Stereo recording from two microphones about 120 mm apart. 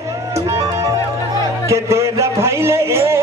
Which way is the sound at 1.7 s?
25° right (ahead or behind).